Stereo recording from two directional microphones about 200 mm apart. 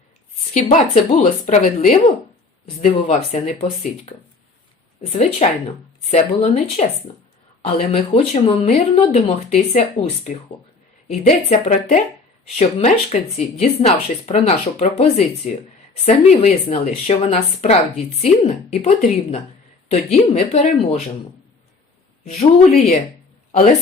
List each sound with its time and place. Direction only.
0.5 s speech: 35° left (ahead or behind)
5.4 s speech: 30° left (ahead or behind)
8.1 s speech: 30° left (ahead or behind)
22.2 s speech: 35° left (ahead or behind)